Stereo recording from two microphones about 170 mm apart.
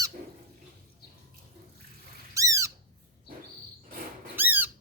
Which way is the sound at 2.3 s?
20° right (ahead or behind).